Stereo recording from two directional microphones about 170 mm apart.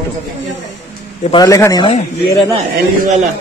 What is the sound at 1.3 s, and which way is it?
Speech, 20° left (ahead or behind).